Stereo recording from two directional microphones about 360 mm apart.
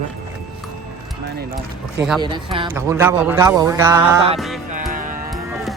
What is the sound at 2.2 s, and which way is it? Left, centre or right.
Speech, centre.